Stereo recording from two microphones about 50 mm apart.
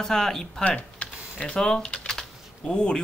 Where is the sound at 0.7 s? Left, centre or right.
Left.